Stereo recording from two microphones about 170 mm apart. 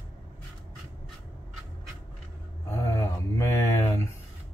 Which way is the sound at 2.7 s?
15° left (ahead or behind).